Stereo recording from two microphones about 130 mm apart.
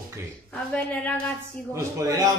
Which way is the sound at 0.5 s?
10° left (ahead or behind).